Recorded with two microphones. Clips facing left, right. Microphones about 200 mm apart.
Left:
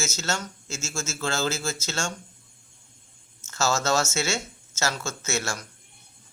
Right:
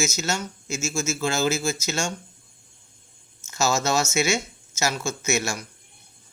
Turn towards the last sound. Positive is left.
turn(degrees=-10)  # may be behind; listen again after turning